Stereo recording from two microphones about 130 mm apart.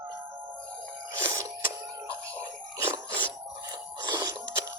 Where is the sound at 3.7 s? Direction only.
35° right (ahead or behind).